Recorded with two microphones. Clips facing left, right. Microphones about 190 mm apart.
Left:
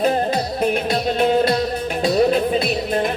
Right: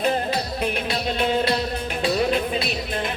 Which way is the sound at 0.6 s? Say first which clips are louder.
Left 8 dB; 45° left (ahead or behind).